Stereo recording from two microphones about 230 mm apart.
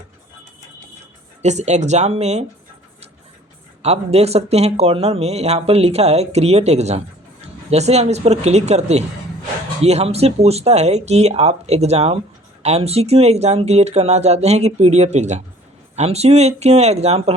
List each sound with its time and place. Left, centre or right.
1.4 s speech: right
3.8 s speech: right